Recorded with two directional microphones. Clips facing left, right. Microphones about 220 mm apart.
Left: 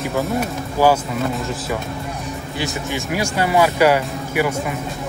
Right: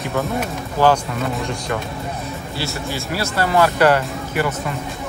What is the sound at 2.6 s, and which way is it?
Speech, 15° left (ahead or behind).